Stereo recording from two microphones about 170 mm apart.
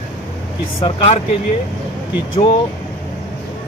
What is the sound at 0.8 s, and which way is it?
Speech, 35° left (ahead or behind).